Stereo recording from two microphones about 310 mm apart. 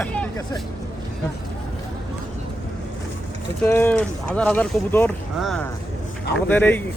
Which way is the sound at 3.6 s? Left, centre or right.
Centre.